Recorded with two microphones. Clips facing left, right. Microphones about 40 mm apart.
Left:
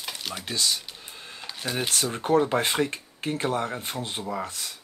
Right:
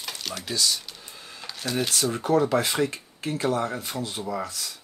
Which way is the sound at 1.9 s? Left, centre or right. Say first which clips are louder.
Left 1 dB; left.